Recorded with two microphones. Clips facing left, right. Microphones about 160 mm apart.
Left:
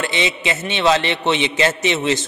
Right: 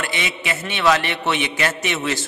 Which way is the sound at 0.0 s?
25° left (ahead or behind).